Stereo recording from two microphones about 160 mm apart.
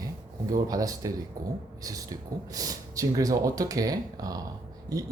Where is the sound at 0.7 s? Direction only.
20° right (ahead or behind).